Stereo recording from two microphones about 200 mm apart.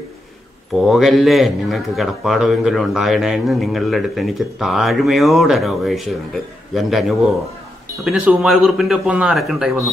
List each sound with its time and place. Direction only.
0.7 s speech: centre (ahead or behind)